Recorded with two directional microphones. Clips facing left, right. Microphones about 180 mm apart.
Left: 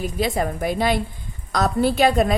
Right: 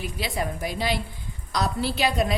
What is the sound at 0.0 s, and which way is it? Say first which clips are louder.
A woman's voice: left 7 dB; 45° left (ahead or behind).